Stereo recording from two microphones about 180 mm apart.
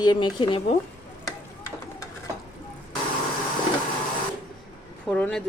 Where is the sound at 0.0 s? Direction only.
25° left (ahead or behind).